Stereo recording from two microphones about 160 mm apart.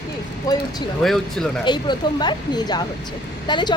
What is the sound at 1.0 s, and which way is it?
Speech, centre (ahead or behind).